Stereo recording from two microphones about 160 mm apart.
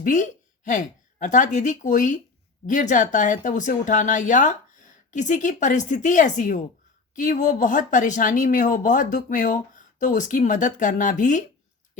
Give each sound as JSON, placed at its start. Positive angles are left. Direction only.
{"t": 0.0, "sound": "a woman's voice", "side_deg": 55}